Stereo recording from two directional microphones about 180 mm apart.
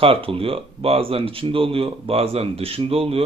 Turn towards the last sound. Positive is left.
turn(degrees=-30)  # may be behind; listen again after turning